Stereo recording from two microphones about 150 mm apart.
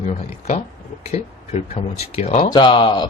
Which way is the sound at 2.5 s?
30° left (ahead or behind).